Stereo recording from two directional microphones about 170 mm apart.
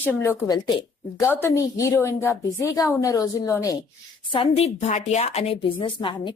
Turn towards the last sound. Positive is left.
turn(degrees=30)  # may be behind; listen again after turning